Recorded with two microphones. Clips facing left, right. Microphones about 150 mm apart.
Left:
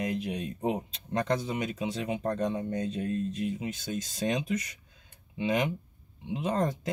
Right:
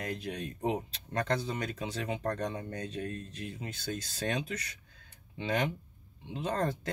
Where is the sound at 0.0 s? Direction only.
20° left (ahead or behind).